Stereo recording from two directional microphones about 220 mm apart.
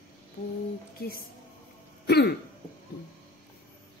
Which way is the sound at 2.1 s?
50° left (ahead or behind).